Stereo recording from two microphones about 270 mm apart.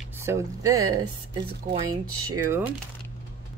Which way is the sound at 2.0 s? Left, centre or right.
Right.